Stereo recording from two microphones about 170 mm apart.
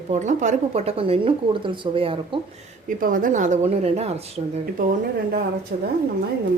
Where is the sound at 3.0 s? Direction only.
55° right (ahead or behind); by 4.6 s 35° right (ahead or behind).